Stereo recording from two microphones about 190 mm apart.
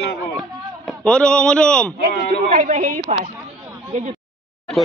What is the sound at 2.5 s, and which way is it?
Speech, 40° right (ahead or behind).